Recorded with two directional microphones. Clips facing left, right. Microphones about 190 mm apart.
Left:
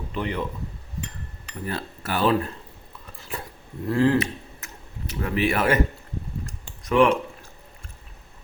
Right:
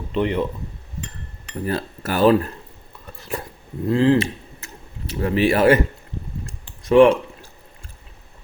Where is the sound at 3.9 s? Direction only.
20° right (ahead or behind).